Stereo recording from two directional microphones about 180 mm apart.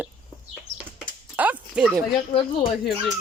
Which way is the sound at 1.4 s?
5° right (ahead or behind).